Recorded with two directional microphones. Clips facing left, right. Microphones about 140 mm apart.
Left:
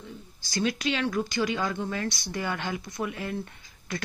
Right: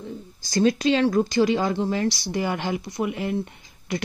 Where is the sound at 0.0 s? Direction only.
40° right (ahead or behind).